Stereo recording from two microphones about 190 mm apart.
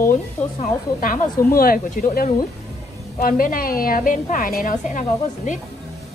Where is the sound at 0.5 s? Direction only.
45° left (ahead or behind).